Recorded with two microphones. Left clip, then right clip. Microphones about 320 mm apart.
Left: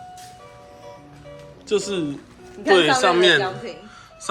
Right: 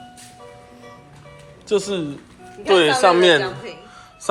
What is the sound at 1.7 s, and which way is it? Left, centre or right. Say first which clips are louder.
Speech: right 2 dB; centre.